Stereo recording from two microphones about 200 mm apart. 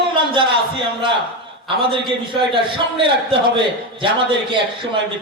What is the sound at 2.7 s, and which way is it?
Speech, 25° right (ahead or behind).